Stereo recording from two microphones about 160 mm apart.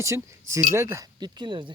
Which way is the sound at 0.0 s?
20° right (ahead or behind).